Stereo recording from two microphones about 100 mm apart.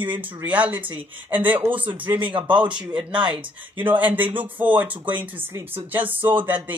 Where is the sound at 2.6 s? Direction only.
50° right (ahead or behind).